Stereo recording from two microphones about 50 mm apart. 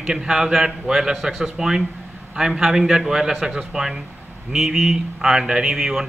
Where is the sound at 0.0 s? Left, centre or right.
Centre.